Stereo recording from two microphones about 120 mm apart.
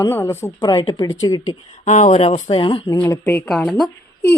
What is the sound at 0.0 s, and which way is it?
Speech, 20° left (ahead or behind).